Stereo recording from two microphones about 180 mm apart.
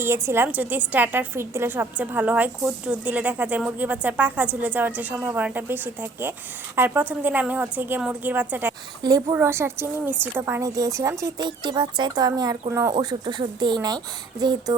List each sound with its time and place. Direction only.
0.0 s a woman's voice: 15° right (ahead or behind)